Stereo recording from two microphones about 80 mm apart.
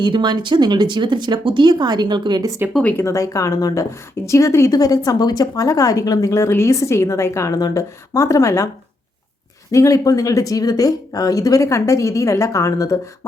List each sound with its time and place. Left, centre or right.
0.0 s speech: right
2.6 s speech: right
3.0 s a woman's voice: left
4.7 s a woman's voice: left
9.7 s speech: left